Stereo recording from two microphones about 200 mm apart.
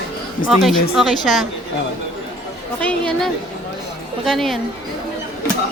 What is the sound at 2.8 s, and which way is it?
Speech, 5° left (ahead or behind).